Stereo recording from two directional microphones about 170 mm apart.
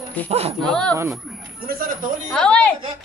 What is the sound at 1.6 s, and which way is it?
Speech, 60° right (ahead or behind).